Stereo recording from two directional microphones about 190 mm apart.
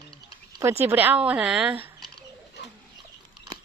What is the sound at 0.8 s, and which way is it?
A woman's voice, 10° right (ahead or behind).